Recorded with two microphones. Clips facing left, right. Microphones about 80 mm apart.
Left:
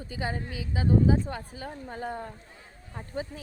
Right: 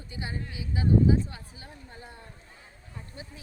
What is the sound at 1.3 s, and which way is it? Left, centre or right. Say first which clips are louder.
A woman's voice: left 9 dB; left.